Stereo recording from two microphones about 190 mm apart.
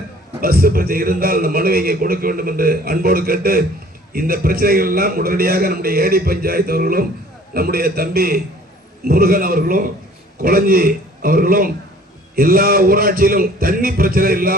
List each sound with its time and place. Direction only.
0.4 s a man's voice: 50° right (ahead or behind)